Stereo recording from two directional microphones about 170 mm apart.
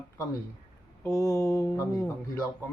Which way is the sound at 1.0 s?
20° left (ahead or behind).